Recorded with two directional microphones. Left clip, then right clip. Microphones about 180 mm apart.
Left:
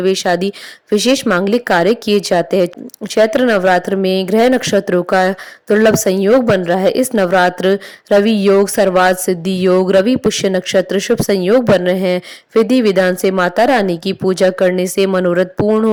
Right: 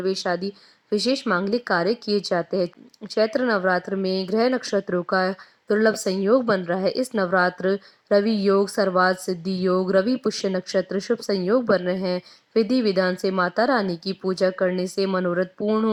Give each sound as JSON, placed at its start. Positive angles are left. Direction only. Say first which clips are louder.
{"t": 0.0, "sound": "speech", "louder": "left 10 dB", "side_deg": 40}